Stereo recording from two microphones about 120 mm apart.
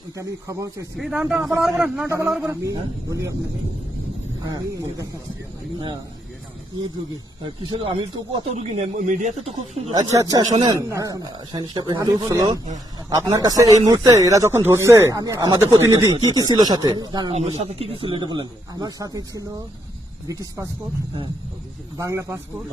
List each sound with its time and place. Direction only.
0.2 s speech: 25° right (ahead or behind)
0.9 s a man's voice: 5° right (ahead or behind)
2.4 s speech: 25° right (ahead or behind)
4.4 s speech: 30° right (ahead or behind)
7.4 s speech: 45° right (ahead or behind); by 9.3 s 70° right (ahead or behind)
9.9 s speech: 30° right (ahead or behind)
17.3 s speech: 60° right (ahead or behind); by 19.5 s 30° right (ahead or behind)
21.9 s speech: 25° right (ahead or behind)